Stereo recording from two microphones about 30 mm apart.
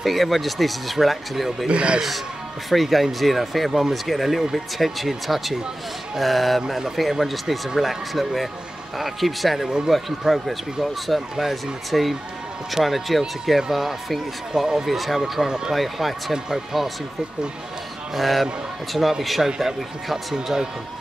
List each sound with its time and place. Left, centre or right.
0.0 s speech: centre
1.7 s a man's voice: right
2.7 s speech: centre
14.5 s speech: centre
14.9 s speech: centre
15.4 s speech: right
15.7 s speech: centre
18.1 s speech: centre